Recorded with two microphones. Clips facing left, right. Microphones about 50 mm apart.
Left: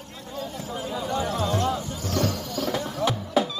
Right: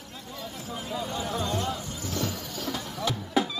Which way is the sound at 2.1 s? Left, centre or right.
Left.